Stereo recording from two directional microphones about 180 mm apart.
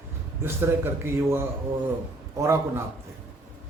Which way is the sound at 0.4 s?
15° right (ahead or behind).